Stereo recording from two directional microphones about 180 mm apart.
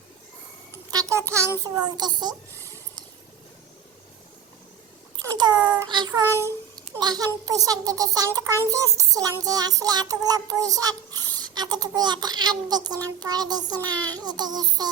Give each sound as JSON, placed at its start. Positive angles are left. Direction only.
{"t": 0.9, "sound": "a sound", "side_deg": -20}
{"t": 1.6, "sound": "child singing", "side_deg": -20}
{"t": 5.1, "sound": "a child's voice", "side_deg": -25}
{"t": 7.4, "sound": "child singing", "side_deg": -20}